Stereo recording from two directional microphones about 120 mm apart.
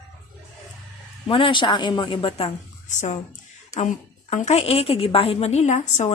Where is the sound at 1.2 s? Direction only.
45° left (ahead or behind).